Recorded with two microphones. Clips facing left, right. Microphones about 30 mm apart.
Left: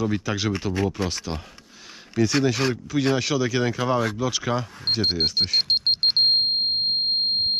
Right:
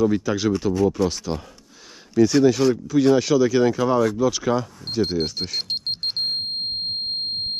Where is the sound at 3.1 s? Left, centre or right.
Centre.